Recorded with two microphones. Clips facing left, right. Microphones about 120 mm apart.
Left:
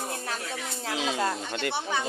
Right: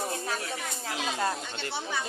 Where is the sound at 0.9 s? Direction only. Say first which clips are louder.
Left 4 dB; 90° left.